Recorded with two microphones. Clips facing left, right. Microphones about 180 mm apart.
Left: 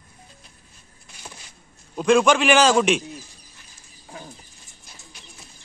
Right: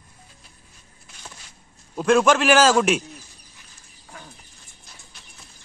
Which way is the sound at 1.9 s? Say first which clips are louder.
Even; 5° right (ahead or behind).